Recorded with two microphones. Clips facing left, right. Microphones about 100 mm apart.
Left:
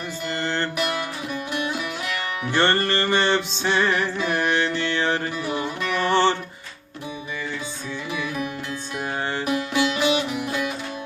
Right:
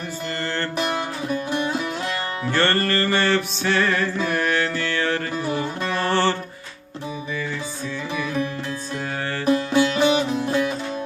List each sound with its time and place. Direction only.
0.4 s music: 20° left (ahead or behind)
0.8 s music: 30° right (ahead or behind)
2.5 s music: 15° left (ahead or behind)
5.8 s music: 35° right (ahead or behind)
6.1 s music: 20° left (ahead or behind)
9.5 s music: 35° right (ahead or behind)